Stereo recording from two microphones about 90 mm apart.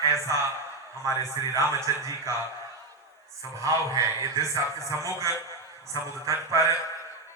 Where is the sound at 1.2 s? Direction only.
35° right (ahead or behind).